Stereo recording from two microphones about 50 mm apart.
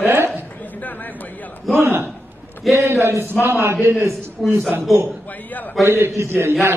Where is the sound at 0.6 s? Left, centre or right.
Left.